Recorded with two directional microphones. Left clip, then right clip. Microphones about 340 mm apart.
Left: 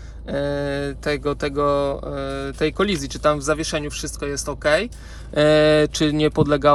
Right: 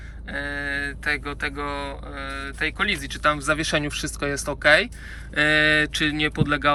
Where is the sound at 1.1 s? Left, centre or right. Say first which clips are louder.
Left 4 dB; centre.